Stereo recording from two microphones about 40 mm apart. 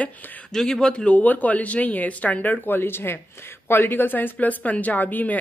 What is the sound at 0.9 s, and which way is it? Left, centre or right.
Speech, left.